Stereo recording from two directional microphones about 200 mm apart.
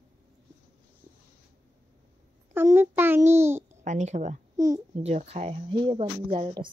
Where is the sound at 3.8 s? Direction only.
35° right (ahead or behind).